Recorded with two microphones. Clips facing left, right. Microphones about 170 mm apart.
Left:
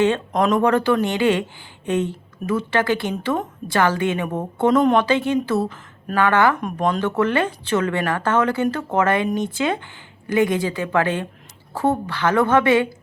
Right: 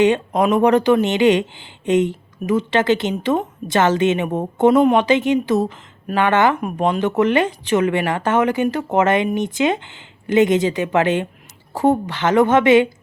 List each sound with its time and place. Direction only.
0.0 s speech: 15° right (ahead or behind)
6.6 s speech: 10° right (ahead or behind)